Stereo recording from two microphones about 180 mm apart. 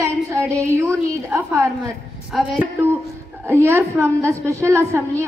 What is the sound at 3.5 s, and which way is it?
A woman's voice, 15° right (ahead or behind).